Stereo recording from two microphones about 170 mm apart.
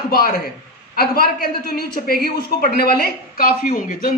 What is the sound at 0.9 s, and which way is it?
Speech, 65° left (ahead or behind).